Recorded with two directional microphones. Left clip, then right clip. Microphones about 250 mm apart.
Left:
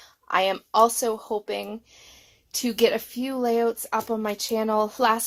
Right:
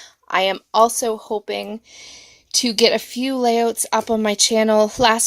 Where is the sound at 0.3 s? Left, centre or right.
Right.